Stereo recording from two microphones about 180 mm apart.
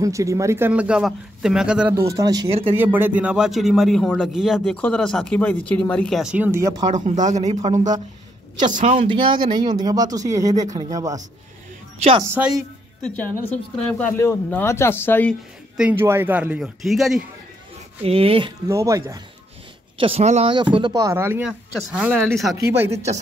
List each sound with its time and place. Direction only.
0.0 s speech: 15° right (ahead or behind)
2.0 s a man's voice: 20° right (ahead or behind)
6.9 s speech: 45° right (ahead or behind)
8.9 s speech: 25° right (ahead or behind)
12.4 s a woman's voice: centre (ahead or behind)
15.8 s speech: 10° right (ahead or behind)
18.0 s speech: 30° right (ahead or behind)
18.7 s speech: 15° right (ahead or behind)
20.0 s speech: 35° right (ahead or behind)
20.7 s a man's voice: 20° right (ahead or behind); by 22.6 s centre (ahead or behind)
22.8 s speech: 40° right (ahead or behind)